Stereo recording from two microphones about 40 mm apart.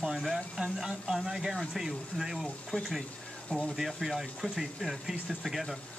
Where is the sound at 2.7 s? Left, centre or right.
Left.